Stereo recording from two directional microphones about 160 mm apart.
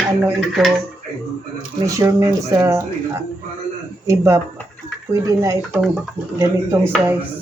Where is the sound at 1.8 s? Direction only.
20° right (ahead or behind).